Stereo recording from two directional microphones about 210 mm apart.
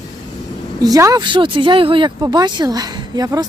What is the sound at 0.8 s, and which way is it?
Speech, 15° right (ahead or behind).